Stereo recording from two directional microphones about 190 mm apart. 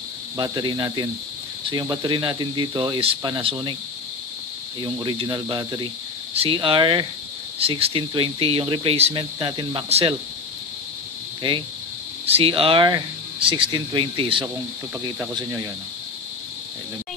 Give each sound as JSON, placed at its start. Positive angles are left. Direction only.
{"t": 0.4, "sound": "speech", "side_deg": -20}
{"t": 4.8, "sound": "speech", "side_deg": -25}
{"t": 12.3, "sound": "speech", "side_deg": -30}